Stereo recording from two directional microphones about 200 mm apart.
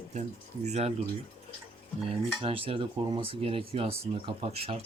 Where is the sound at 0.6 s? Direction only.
35° right (ahead or behind).